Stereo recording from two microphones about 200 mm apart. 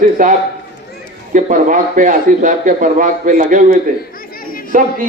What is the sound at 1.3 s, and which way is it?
Speech, 40° right (ahead or behind).